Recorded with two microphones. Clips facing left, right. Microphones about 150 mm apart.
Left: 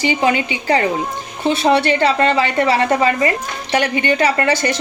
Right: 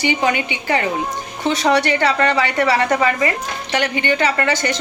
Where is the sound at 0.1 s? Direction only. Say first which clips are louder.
Left 2 dB; 25° left (ahead or behind).